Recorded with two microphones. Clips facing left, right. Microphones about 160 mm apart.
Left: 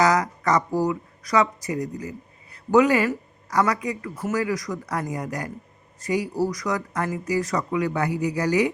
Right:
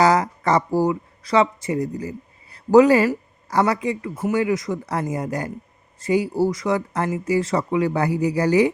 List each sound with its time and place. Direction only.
0.0 s speech: 30° right (ahead or behind)